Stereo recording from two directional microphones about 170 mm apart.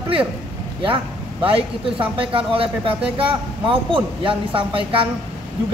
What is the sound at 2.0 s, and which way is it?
Speech, 30° right (ahead or behind).